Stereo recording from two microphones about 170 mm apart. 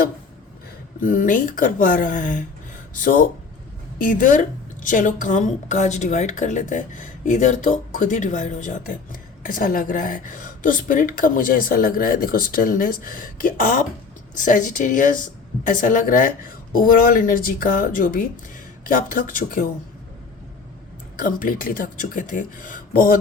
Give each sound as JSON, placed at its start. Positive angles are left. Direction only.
{"t": 0.9, "sound": "a woman's voice", "side_deg": 50}
{"t": 21.2, "sound": "a woman's voice", "side_deg": 55}